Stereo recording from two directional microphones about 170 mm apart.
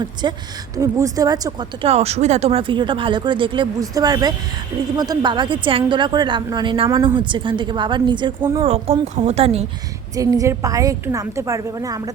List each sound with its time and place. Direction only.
0.0 s a woman's voice: 25° right (ahead or behind)
1.9 s a woman's voice: 40° right (ahead or behind)
8.6 s speech: 35° right (ahead or behind)
10.2 s a woman's voice: 20° right (ahead or behind)